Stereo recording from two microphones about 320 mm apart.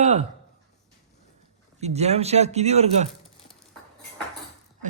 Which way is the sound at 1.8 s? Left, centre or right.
Centre.